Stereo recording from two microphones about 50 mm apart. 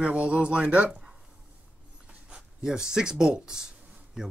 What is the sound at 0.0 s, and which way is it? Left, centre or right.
Speech, right.